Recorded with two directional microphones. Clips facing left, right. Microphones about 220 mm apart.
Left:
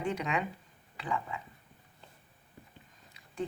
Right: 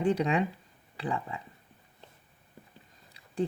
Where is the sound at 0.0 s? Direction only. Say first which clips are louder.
Right 6 dB; 35° right (ahead or behind).